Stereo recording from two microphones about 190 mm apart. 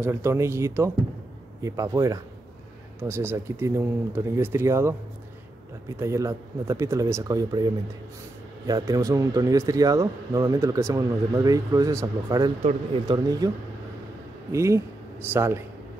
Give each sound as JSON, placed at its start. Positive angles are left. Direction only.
{"t": 0.0, "sound": "speech", "side_deg": -15}
{"t": 5.9, "sound": "speech", "side_deg": -15}
{"t": 14.5, "sound": "speech", "side_deg": -15}